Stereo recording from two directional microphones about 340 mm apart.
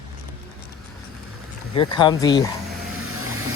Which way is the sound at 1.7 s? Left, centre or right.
Centre.